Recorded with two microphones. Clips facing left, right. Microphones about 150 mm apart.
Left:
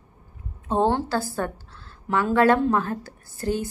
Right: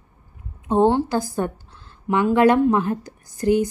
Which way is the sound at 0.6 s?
15° right (ahead or behind).